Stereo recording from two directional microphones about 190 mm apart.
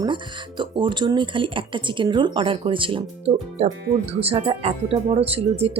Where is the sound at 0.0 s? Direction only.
25° right (ahead or behind).